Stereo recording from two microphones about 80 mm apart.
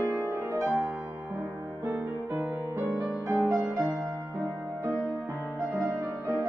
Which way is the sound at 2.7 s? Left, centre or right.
Right.